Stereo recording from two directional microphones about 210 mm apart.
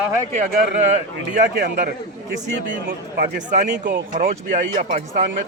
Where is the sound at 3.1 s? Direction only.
45° right (ahead or behind).